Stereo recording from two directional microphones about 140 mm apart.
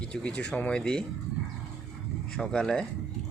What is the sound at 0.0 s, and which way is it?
Speech, 5° left (ahead or behind).